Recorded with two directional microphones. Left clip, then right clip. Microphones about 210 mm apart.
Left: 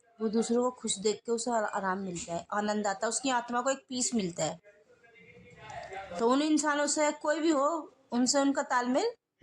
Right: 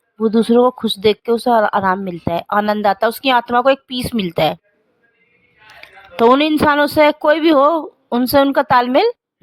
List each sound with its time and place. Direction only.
0.4 s speech: 35° right (ahead or behind)
6.1 s speech: 40° right (ahead or behind)